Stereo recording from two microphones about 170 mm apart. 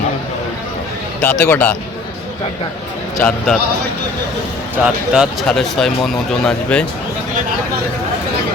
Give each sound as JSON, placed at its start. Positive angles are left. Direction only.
{"t": 1.2, "sound": "speech", "side_deg": 10}
{"t": 3.2, "sound": "speech", "side_deg": 5}
{"t": 4.8, "sound": "speech", "side_deg": -5}